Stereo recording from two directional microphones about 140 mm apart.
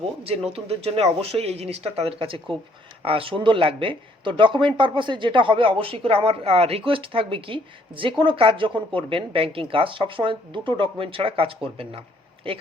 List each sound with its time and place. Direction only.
0.3 s speech: 45° right (ahead or behind)